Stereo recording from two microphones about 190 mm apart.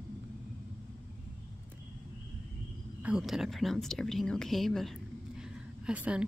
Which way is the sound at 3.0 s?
5° right (ahead or behind).